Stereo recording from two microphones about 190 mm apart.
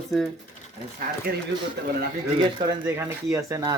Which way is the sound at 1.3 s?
50° right (ahead or behind).